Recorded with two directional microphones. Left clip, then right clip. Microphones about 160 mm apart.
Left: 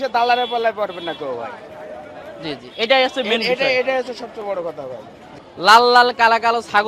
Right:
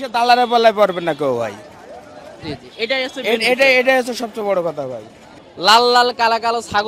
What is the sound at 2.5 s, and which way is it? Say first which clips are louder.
Speech: left 4 dB; 15° left (ahead or behind).